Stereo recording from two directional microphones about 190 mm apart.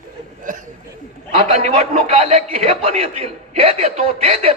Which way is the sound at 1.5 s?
40° right (ahead or behind).